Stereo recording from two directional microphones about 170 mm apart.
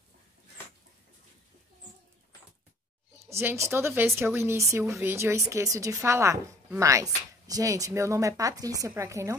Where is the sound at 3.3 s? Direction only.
15° right (ahead or behind).